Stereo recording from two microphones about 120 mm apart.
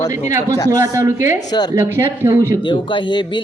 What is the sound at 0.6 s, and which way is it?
Speech, 25° right (ahead or behind).